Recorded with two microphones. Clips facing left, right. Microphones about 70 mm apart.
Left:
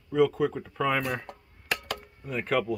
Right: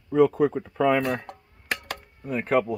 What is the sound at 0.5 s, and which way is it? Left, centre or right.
Speech, centre.